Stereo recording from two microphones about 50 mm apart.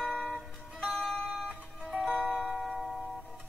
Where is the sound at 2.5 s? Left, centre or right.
Centre.